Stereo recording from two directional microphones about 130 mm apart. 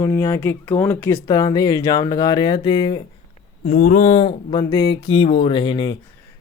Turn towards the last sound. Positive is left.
turn(degrees=40)  # may be behind; listen again after turning